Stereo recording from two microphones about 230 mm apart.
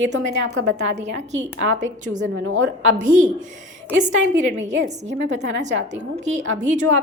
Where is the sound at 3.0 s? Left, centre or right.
Right.